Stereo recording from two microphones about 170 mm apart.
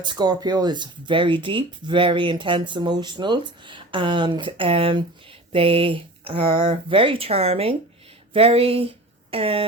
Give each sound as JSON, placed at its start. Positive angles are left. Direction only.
{"t": 0.0, "sound": "speech", "side_deg": -25}